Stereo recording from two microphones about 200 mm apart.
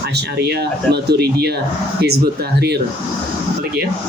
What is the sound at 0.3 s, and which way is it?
Speech, 55° right (ahead or behind).